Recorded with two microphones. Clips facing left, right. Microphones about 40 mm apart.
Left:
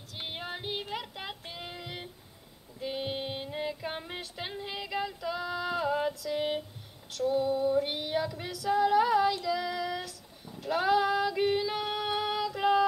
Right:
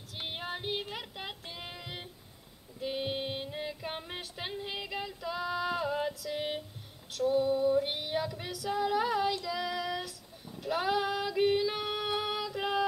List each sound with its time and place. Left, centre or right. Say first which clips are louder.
0.2 s child singing: even; centre
2.8 s female singing: even; centre